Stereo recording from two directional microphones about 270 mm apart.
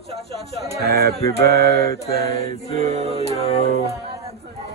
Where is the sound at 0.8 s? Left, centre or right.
Right.